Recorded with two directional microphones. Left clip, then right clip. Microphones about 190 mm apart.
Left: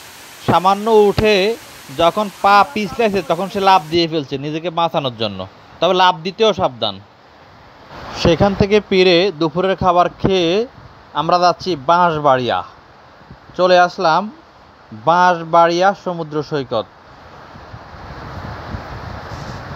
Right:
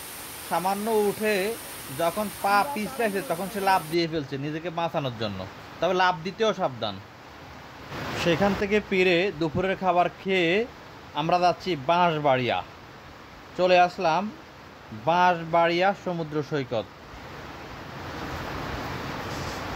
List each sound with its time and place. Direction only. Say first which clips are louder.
0.6 s speech: left 13 dB; 40° left (ahead or behind)
8.3 s a man's voice: left 10 dB; 35° left (ahead or behind); by 16.8 s 15° left (ahead or behind)